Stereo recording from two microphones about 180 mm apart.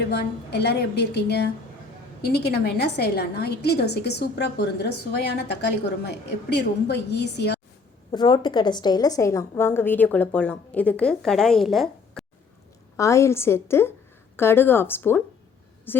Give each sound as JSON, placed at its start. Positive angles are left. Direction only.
{"t": 0.1, "sound": "a woman's voice", "side_deg": 65}
{"t": 8.1, "sound": "a woman's voice", "side_deg": 25}
{"t": 13.0, "sound": "a woman's voice", "side_deg": 15}